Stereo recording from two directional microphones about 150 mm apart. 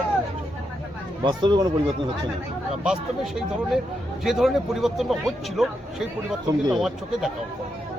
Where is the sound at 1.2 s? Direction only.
30° right (ahead or behind).